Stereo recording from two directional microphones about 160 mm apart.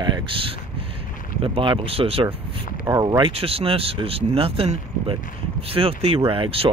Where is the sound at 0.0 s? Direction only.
30° right (ahead or behind).